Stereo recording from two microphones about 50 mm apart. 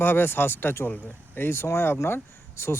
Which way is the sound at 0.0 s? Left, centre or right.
Left.